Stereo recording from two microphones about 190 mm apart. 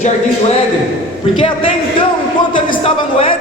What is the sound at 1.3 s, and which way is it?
Speech, 30° left (ahead or behind).